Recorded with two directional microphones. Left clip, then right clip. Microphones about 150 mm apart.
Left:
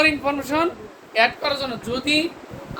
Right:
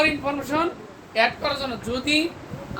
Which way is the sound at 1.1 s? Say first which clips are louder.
Left 2 dB; 40° left (ahead or behind).